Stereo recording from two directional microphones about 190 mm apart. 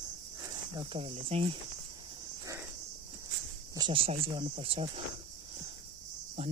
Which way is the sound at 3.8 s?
30° right (ahead or behind).